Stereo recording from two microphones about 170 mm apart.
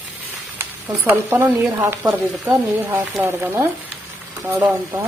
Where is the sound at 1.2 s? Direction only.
15° right (ahead or behind).